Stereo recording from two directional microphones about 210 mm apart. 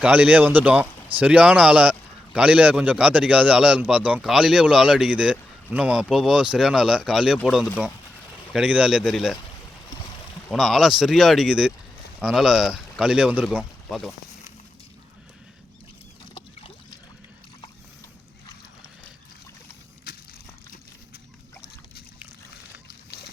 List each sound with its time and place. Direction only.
0.0 s a man's voice: 5° right (ahead or behind)
10.5 s a man's voice: centre (ahead or behind)
16.3 s boat: 25° left (ahead or behind)
22.9 s a sound: 50° left (ahead or behind)